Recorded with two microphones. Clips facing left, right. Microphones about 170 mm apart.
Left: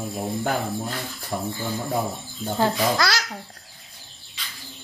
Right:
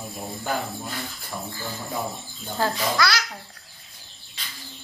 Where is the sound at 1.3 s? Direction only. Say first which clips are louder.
Left 6 dB; 35° left (ahead or behind).